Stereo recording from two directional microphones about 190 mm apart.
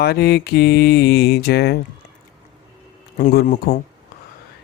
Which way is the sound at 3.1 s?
40° left (ahead or behind).